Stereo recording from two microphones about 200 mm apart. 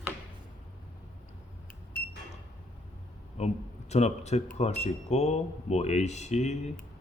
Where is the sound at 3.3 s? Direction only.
35° left (ahead or behind).